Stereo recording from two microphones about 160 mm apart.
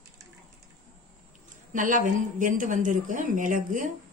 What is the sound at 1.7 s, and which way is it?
Speech, 55° right (ahead or behind).